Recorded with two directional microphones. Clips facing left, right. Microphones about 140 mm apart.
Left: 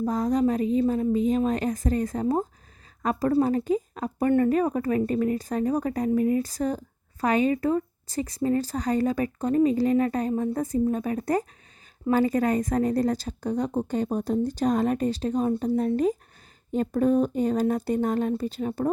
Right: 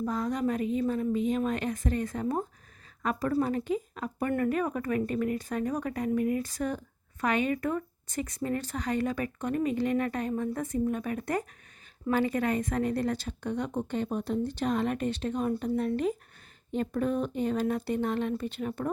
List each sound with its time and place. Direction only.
0.0 s speech: 35° left (ahead or behind)